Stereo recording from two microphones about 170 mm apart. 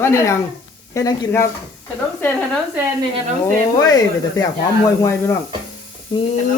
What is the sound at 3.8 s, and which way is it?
Speech, 20° left (ahead or behind).